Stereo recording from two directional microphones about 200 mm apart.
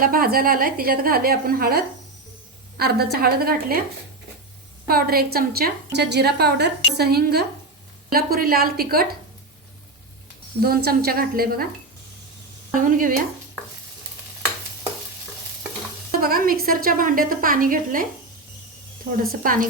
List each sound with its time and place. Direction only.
0.0 s a woman's voice: 45° right (ahead or behind)
4.9 s a woman's voice: 50° right (ahead or behind)
10.6 s a woman's voice: 50° right (ahead or behind)
12.7 s a woman's voice: 40° right (ahead or behind)
16.1 s a woman's voice: 45° right (ahead or behind)
19.2 s a woman's voice: 45° right (ahead or behind)